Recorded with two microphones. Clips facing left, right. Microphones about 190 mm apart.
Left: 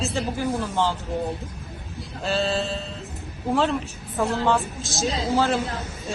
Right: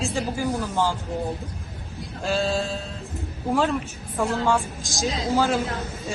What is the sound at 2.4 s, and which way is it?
Speech, 10° right (ahead or behind).